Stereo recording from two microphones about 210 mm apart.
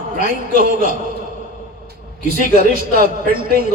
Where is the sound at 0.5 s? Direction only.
40° right (ahead or behind).